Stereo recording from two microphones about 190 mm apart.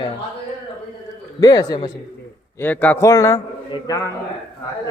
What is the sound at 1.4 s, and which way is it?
Speech, 20° left (ahead or behind).